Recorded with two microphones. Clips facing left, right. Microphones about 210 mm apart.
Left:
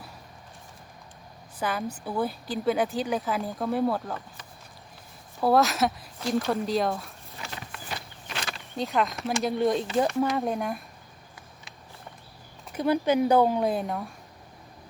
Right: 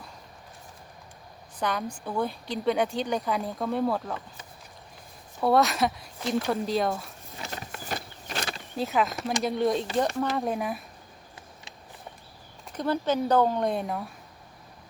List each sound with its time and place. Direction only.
1.5 s speech: 5° left (ahead or behind)
5.4 s speech: centre (ahead or behind)
7.5 s walk: 40° right (ahead or behind)
8.7 s speech: 5° right (ahead or behind)
12.7 s speech: 10° left (ahead or behind)